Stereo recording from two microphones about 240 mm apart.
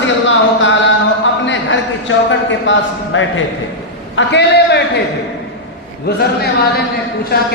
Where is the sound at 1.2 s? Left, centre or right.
Left.